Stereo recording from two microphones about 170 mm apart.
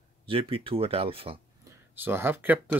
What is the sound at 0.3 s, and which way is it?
Speech, 35° right (ahead or behind).